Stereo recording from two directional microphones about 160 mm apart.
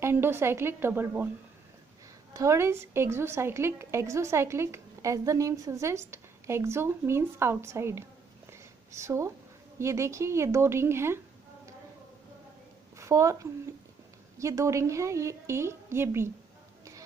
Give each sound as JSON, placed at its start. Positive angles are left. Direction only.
{"t": 0.0, "sound": "a woman's voice", "side_deg": -15}
{"t": 2.3, "sound": "a woman's voice", "side_deg": -20}
{"t": 12.9, "sound": "a woman's voice", "side_deg": -20}